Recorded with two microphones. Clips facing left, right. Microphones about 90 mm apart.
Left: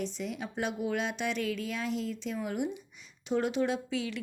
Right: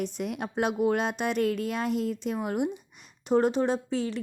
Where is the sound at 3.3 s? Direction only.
40° right (ahead or behind).